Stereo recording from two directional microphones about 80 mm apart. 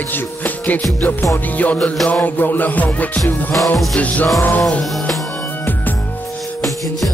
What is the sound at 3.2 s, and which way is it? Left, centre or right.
Music, centre.